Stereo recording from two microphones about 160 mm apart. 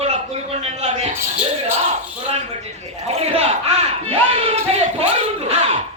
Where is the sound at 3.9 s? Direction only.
40° right (ahead or behind).